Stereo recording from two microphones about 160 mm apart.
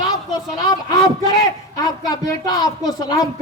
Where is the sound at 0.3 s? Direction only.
25° left (ahead or behind).